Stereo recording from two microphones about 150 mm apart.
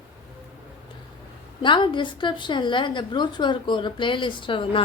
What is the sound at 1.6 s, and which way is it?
A woman's voice, 35° left (ahead or behind).